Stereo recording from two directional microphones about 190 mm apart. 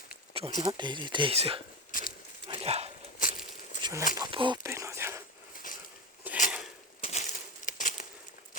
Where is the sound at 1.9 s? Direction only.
45° left (ahead or behind).